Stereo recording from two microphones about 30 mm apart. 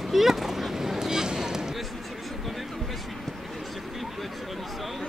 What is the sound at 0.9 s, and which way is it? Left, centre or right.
Boat, right.